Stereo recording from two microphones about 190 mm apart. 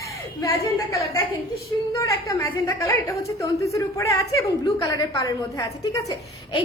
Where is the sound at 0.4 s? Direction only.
15° left (ahead or behind).